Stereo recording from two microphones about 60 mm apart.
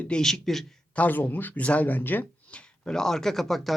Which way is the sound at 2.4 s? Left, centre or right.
Centre.